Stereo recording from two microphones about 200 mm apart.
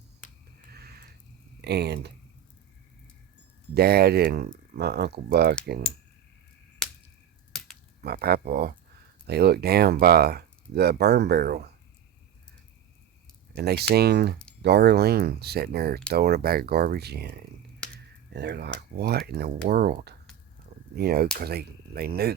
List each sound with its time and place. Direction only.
0.7 s a sound: 50° right (ahead or behind)
1.6 s speech: 55° right (ahead or behind)
3.8 s speech: 50° right (ahead or behind)
8.0 s speech: 55° right (ahead or behind)
13.6 s speech: 55° right (ahead or behind)